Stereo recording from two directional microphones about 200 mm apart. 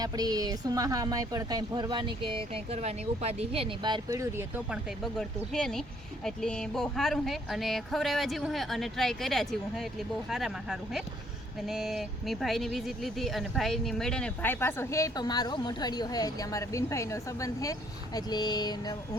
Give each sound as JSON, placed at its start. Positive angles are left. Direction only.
{"t": 0.0, "sound": "speech", "side_deg": -20}
{"t": 5.5, "sound": "speech", "side_deg": 5}